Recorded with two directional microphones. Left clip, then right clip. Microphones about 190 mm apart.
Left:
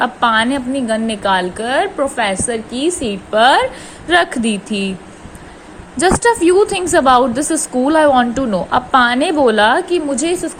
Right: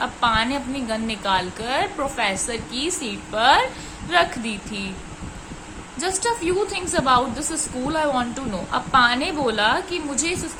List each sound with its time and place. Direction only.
0.0 s a woman's voice: 30° left (ahead or behind)
6.0 s a woman's voice: 35° left (ahead or behind)